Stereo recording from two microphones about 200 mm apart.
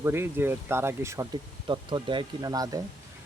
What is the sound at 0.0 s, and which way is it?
Speech, 10° right (ahead or behind).